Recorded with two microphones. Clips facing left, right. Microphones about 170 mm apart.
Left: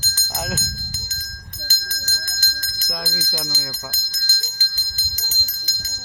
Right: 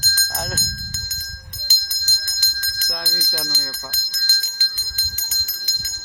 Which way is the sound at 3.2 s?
Centre (ahead or behind).